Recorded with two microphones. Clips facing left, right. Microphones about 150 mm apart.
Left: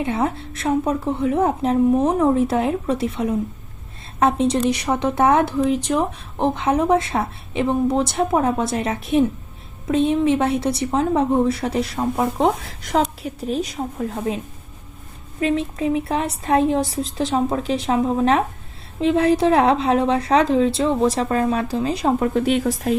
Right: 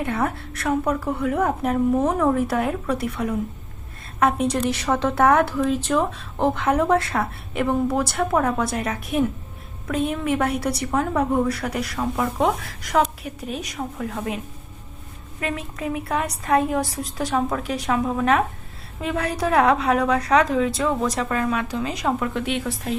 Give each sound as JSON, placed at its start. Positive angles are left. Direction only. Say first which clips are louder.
{"t": 0.0, "sound": "a woman's voice", "louder": "left 3 dB", "side_deg": 20}